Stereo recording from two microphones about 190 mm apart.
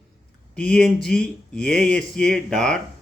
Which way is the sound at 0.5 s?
5° left (ahead or behind).